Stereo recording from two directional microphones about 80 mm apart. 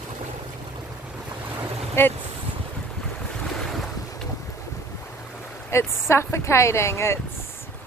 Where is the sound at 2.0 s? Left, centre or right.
Left.